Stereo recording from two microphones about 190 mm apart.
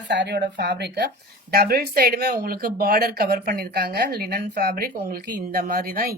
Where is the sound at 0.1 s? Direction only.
65° right (ahead or behind).